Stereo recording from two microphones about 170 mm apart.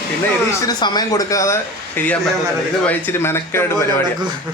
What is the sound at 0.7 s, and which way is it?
Speech, 25° left (ahead or behind).